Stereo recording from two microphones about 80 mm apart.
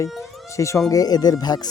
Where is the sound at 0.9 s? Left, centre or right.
Left.